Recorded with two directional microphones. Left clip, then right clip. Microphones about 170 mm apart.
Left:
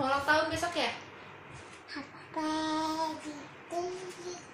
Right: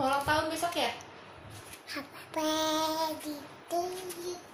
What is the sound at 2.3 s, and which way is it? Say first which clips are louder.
Child singing: right 3 dB; 30° right (ahead or behind).